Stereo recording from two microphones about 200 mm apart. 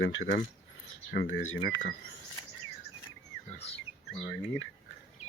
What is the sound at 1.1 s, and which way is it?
Speech, 60° left (ahead or behind).